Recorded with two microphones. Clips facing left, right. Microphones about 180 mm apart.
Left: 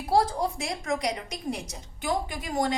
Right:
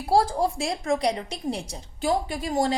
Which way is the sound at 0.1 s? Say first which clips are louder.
Right 3 dB; 30° right (ahead or behind).